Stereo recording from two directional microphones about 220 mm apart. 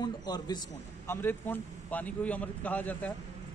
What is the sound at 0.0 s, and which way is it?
A man's voice, 20° left (ahead or behind).